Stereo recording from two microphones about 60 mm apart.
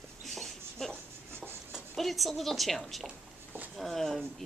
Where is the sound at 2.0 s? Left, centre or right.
Centre.